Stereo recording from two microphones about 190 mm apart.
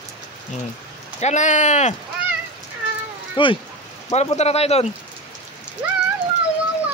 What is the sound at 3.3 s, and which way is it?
Speech, 25° left (ahead or behind).